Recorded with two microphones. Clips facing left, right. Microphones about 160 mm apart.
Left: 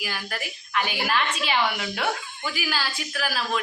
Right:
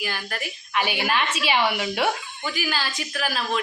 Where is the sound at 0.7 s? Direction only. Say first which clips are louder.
Right 1 dB; 15° right (ahead or behind).